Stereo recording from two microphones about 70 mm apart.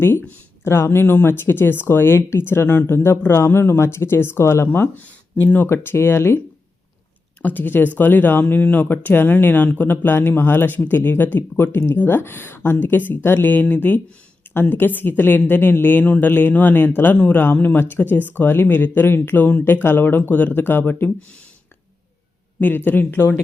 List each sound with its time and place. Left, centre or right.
0.0 s speech: left
4.9 s speech: left
7.4 s speech: left
22.6 s speech: left